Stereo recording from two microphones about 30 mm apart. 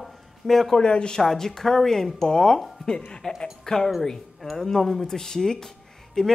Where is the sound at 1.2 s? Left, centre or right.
Centre.